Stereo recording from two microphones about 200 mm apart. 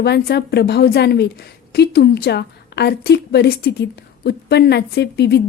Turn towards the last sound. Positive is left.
turn(degrees=55)  # may be behind; listen again after turning